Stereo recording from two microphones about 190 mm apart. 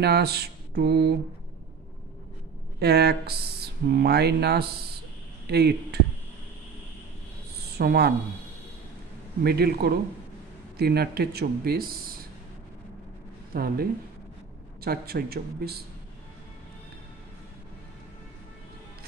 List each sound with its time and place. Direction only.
0.0 s mantra: 55° right (ahead or behind)
2.8 s speech: 60° right (ahead or behind)
7.7 s speech: 55° right (ahead or behind)
9.4 s speech: 55° right (ahead or behind)
13.5 s speech: 50° right (ahead or behind)